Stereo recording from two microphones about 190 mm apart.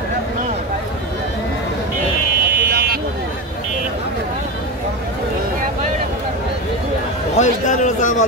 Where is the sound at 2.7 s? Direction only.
55° right (ahead or behind).